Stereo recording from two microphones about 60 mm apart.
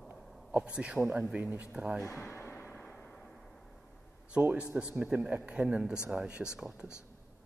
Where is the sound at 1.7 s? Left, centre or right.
Centre.